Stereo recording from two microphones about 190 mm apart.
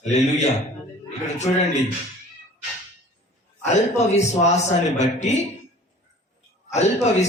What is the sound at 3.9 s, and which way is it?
A man's voice, 35° left (ahead or behind).